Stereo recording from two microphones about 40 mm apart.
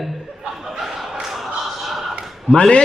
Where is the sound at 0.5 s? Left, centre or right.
Centre.